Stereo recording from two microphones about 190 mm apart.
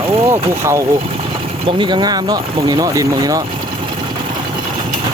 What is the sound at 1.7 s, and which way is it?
Speech, 25° right (ahead or behind).